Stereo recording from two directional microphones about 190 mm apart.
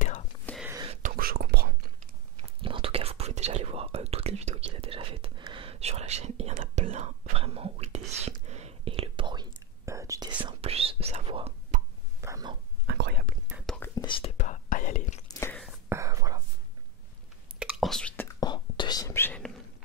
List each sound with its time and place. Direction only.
0.5 s whispering: 10° left (ahead or behind)
1.0 s whispering: 50° right (ahead or behind)
2.6 s whispering: 30° right (ahead or behind)
11.7 s whispering: 45° right (ahead or behind)
12.2 s a sound: 15° right (ahead or behind)
12.8 s whispering: 60° right (ahead or behind)
13.5 s whispering: 5° right (ahead or behind)
13.7 s whispering: 10° left (ahead or behind)
14.3 s whispering: 40° left (ahead or behind)
15.4 s whispering: 5° left (ahead or behind)
15.9 s whispering: 15° right (ahead or behind)
17.6 s whispering: centre (ahead or behind)
18.4 s whispering: 20° left (ahead or behind)